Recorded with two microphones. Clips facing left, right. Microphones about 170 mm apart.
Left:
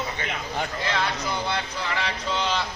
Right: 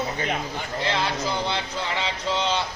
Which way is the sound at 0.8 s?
25° right (ahead or behind).